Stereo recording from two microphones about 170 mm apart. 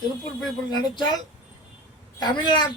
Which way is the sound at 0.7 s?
25° left (ahead or behind).